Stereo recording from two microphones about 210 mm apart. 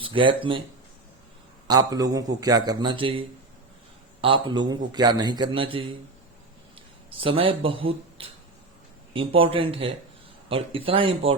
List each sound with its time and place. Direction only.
0.0 s speech: 25° right (ahead or behind)
1.6 s a man's voice: 20° right (ahead or behind)
7.2 s a man's voice: 25° right (ahead or behind)
8.2 s a sound: 25° right (ahead or behind)
9.1 s a man's voice: 25° right (ahead or behind)